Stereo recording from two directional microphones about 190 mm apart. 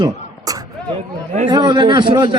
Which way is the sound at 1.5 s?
25° right (ahead or behind).